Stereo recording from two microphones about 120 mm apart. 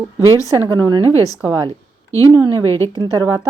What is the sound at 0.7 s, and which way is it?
Speech, 35° right (ahead or behind).